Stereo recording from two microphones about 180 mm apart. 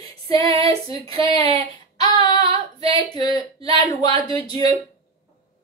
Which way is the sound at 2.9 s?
20° left (ahead or behind).